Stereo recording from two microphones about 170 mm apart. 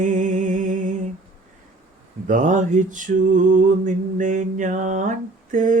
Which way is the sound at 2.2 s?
50° right (ahead or behind).